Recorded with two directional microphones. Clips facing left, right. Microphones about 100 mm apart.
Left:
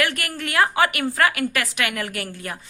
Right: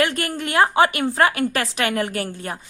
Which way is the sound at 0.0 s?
25° right (ahead or behind).